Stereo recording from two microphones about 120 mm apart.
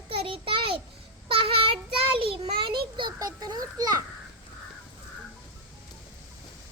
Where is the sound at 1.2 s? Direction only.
50° right (ahead or behind); by 3.8 s 35° right (ahead or behind).